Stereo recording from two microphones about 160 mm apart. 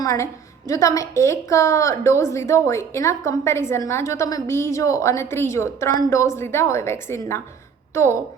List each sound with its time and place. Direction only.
0.0 s a woman's voice: 20° left (ahead or behind)